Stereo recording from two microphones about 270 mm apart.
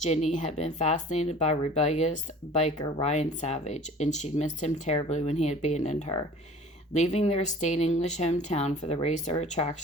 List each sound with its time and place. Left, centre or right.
0.0 s speech: left